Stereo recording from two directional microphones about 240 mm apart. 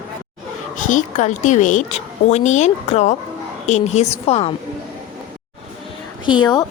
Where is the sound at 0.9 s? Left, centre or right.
Left.